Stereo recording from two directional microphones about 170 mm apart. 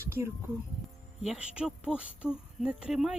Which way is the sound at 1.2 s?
5° right (ahead or behind).